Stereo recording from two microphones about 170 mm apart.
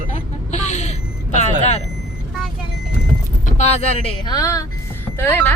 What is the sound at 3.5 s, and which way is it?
Speech, 40° left (ahead or behind).